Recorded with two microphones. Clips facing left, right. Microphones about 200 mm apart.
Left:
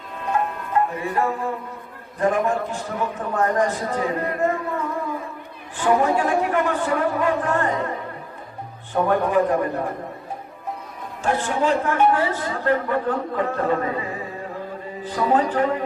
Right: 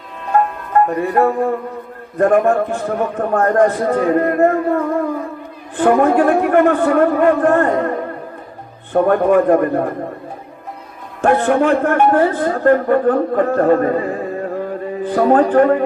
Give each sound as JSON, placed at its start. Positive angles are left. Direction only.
{"t": 0.7, "sound": "music", "side_deg": -60}
{"t": 2.1, "sound": "a man's voice", "side_deg": -55}
{"t": 11.2, "sound": "a man's voice", "side_deg": -60}